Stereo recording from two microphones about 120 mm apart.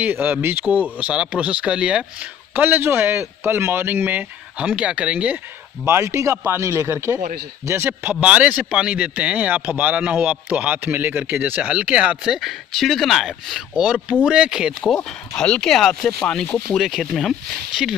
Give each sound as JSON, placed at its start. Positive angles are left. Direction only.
{"t": 0.0, "sound": "a man's voice", "side_deg": -15}
{"t": 5.9, "sound": "a man's voice", "side_deg": -20}